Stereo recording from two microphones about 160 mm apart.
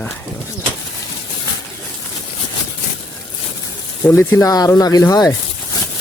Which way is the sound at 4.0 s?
15° left (ahead or behind).